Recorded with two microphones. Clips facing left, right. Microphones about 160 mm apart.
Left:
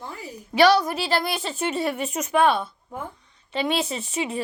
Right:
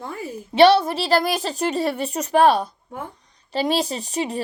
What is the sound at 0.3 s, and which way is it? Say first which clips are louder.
Speech: right 4 dB; 25° right (ahead or behind).